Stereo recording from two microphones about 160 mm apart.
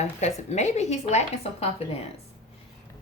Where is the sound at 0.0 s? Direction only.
45° left (ahead or behind).